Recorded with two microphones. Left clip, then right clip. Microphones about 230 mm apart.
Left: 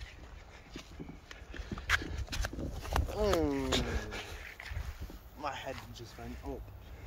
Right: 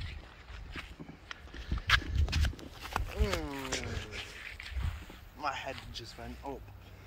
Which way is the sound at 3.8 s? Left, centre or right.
Centre.